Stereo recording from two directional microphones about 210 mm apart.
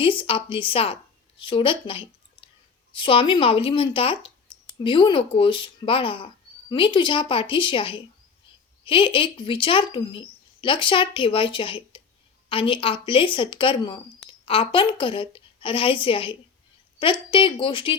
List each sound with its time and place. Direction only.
0.0 s speech: 25° left (ahead or behind)